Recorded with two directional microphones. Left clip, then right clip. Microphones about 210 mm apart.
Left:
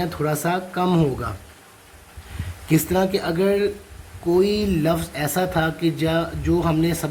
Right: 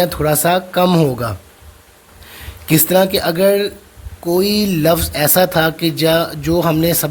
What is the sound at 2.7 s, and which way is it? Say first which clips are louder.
Speech: right 7 dB; 50° right (ahead or behind).